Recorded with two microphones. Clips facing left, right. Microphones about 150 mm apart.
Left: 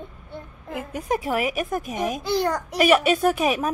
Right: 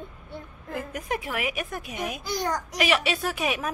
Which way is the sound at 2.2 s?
30° left (ahead or behind).